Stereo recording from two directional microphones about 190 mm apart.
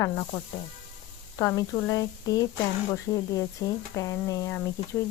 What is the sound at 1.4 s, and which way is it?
A woman's voice, 15° left (ahead or behind).